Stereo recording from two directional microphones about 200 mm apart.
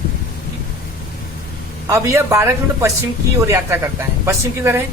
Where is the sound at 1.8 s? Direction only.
15° right (ahead or behind).